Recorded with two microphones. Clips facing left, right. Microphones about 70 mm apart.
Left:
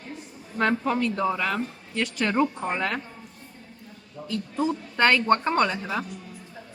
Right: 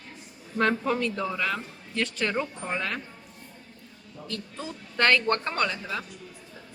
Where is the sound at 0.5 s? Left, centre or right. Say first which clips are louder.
Left 1 dB; centre.